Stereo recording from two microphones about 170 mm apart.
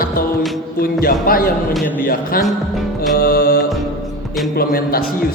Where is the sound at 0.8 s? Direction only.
60° left (ahead or behind).